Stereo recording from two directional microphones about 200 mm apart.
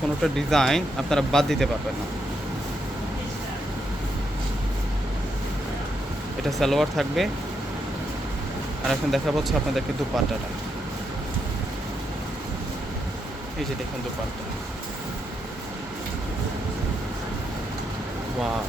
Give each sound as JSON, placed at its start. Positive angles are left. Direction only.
{"t": 0.2, "sound": "speech", "side_deg": 0}
{"t": 6.6, "sound": "speech", "side_deg": 0}
{"t": 8.9, "sound": "speech", "side_deg": 0}